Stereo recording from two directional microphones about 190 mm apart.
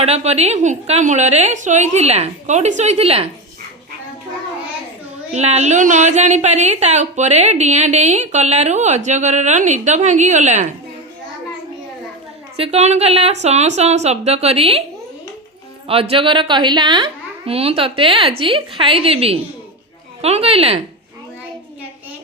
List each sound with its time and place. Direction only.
0.0 s a woman's voice: 35° right (ahead or behind)
5.3 s a woman's voice: 35° right (ahead or behind)
12.5 s a woman's voice: 30° right (ahead or behind)
15.9 s a woman's voice: 30° right (ahead or behind)